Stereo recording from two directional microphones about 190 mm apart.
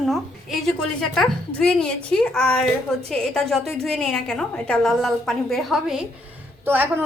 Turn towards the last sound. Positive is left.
turn(degrees=-10)  # may be behind; listen again after turning